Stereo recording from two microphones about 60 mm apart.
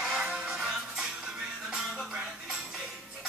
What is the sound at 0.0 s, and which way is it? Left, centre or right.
Music, centre.